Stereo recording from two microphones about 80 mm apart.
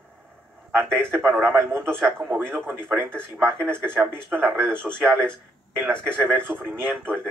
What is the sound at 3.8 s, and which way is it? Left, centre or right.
Speech, right.